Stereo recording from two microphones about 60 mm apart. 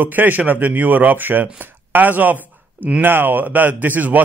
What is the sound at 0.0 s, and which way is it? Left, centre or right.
A man's voice, right.